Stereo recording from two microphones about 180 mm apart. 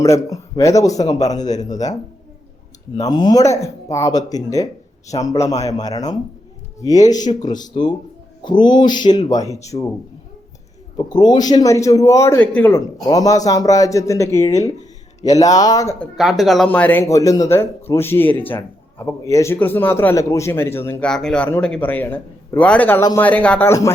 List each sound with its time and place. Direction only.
0.0 s a man's voice: 20° left (ahead or behind)
3.0 s a man's voice: 25° left (ahead or behind)
10.9 s a man's voice: 25° left (ahead or behind)
16.1 s a man's voice: centre (ahead or behind)
21.1 s a man's voice: 5° left (ahead or behind)